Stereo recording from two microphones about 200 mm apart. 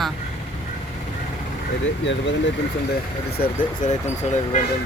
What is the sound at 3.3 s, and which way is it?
Speech, 40° left (ahead or behind).